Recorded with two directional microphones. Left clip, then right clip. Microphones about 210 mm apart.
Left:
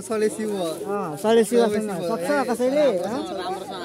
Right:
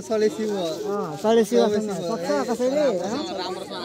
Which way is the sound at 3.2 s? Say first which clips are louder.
Even; 25° left (ahead or behind).